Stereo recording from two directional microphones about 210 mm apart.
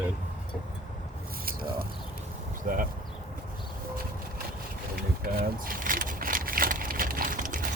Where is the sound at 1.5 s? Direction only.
45° right (ahead or behind).